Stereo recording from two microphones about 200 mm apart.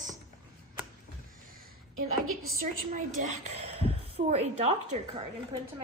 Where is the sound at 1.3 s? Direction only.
45° right (ahead or behind).